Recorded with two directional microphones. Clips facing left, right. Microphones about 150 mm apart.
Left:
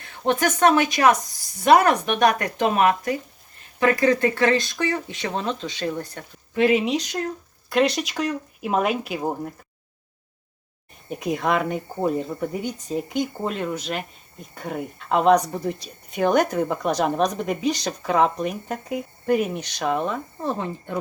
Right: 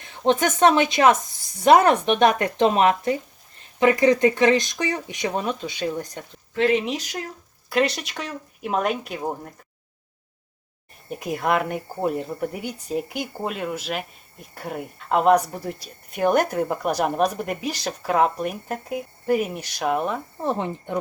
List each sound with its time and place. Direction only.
0.0 s a woman's voice: 20° right (ahead or behind)
6.6 s speech: 10° left (ahead or behind)
6.8 s speech: centre (ahead or behind)
11.1 s speech: 5° right (ahead or behind)